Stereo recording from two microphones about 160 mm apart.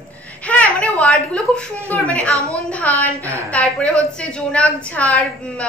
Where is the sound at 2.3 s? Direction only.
20° right (ahead or behind).